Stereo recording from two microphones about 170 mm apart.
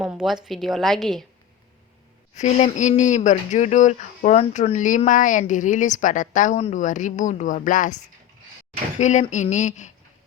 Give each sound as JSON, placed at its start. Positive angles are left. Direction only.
{"t": 0.0, "sound": "a woman's voice", "side_deg": -5}
{"t": 2.3, "sound": "speech", "side_deg": 45}
{"t": 9.0, "sound": "speech", "side_deg": 45}